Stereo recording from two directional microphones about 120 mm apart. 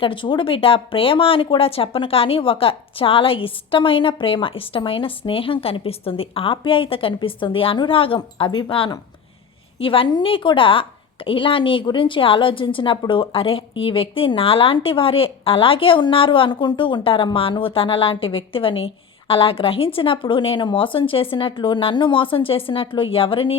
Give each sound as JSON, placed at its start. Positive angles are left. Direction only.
{"t": 0.0, "sound": "speech", "side_deg": 45}